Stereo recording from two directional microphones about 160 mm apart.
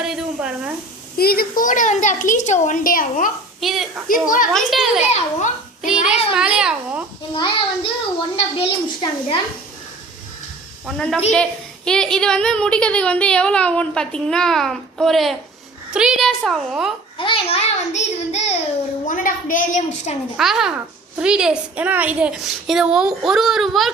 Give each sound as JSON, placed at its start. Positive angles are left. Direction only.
{"t": 0.0, "sound": "sizzle", "side_deg": -5}
{"t": 1.2, "sound": "a woman's voice", "side_deg": 70}
{"t": 3.6, "sound": "a child's voice", "side_deg": 0}
{"t": 4.1, "sound": "a woman's voice", "side_deg": 60}
{"t": 4.5, "sound": "a child's voice", "side_deg": 0}
{"t": 5.0, "sound": "a child's voice", "side_deg": 50}
{"t": 6.3, "sound": "a child's voice", "side_deg": -5}
{"t": 8.4, "sound": "a child's voice", "side_deg": 35}
{"t": 10.8, "sound": "a child's voice", "side_deg": 0}
{"t": 17.2, "sound": "a child's voice", "side_deg": 35}
{"t": 19.0, "sound": "a woman's voice", "side_deg": 55}
{"t": 20.3, "sound": "a child's voice", "side_deg": 0}